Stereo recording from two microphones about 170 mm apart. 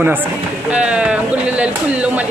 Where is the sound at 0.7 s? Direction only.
5° right (ahead or behind).